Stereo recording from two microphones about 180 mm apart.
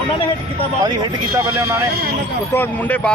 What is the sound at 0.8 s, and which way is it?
Speech, 20° right (ahead or behind).